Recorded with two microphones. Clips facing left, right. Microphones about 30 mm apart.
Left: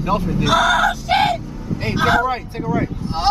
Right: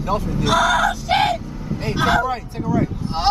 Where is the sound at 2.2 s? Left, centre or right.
Left.